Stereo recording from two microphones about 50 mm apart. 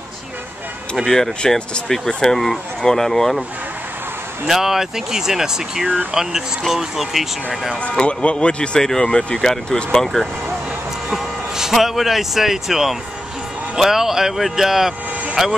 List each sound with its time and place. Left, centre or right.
1.0 s speech: centre
4.5 s speech: centre
8.0 s speech: left
11.1 s speech: centre